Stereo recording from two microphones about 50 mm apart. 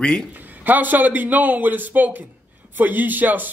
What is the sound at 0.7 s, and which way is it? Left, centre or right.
A man's voice, right.